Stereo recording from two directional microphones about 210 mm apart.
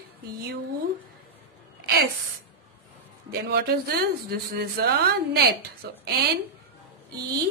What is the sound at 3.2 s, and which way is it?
Speech, 50° right (ahead or behind).